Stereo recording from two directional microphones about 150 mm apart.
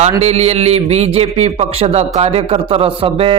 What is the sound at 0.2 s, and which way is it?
A man's voice, 45° right (ahead or behind).